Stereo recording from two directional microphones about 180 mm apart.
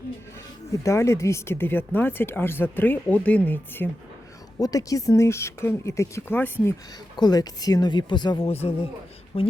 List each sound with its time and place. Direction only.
0.9 s speech: 15° left (ahead or behind)